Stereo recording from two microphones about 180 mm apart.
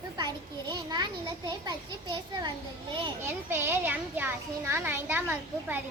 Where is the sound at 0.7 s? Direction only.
25° right (ahead or behind).